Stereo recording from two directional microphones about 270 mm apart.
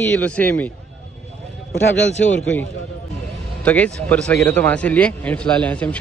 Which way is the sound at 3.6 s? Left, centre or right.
Centre.